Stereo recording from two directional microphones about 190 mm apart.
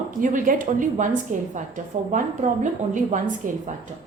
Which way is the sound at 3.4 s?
40° right (ahead or behind).